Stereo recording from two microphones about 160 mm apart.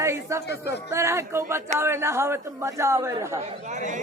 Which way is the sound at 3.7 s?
50° right (ahead or behind).